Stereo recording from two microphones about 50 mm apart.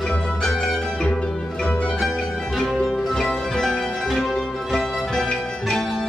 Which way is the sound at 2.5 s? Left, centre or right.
Centre.